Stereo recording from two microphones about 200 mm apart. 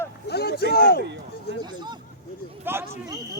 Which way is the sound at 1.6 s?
20° right (ahead or behind).